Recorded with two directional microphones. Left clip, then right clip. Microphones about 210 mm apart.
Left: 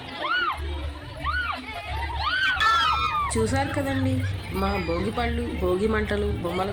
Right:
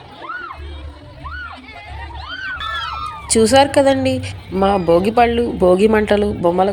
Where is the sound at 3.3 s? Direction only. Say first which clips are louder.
Right 14 dB; 35° right (ahead or behind).